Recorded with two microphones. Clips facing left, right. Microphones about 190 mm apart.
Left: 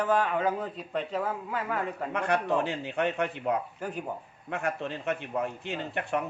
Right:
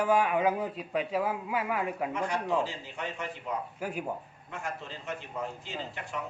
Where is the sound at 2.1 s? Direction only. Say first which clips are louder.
Left 5 dB; 65° left (ahead or behind).